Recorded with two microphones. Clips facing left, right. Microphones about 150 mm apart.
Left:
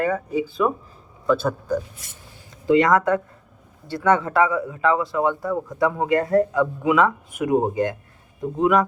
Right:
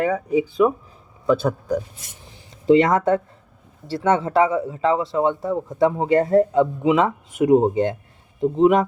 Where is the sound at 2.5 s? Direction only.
25° right (ahead or behind).